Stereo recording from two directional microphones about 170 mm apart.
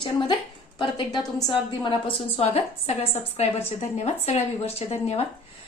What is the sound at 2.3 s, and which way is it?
A woman's voice, 35° left (ahead or behind).